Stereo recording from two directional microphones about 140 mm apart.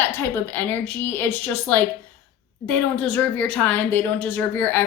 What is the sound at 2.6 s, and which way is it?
A woman's voice, 10° left (ahead or behind).